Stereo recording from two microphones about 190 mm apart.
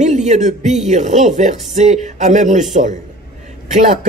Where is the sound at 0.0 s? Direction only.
40° right (ahead or behind).